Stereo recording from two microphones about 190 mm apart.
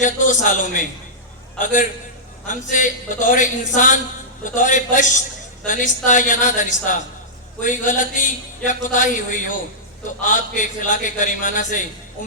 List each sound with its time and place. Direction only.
0.0 s a man's voice: 40° left (ahead or behind)